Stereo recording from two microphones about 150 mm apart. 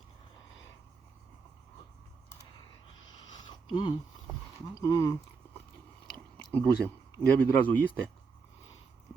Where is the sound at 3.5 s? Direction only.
35° left (ahead or behind).